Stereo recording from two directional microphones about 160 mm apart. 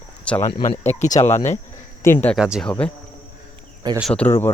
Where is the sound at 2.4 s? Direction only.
5° right (ahead or behind).